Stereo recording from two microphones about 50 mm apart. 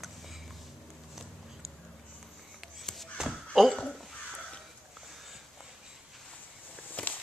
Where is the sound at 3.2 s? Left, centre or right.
Centre.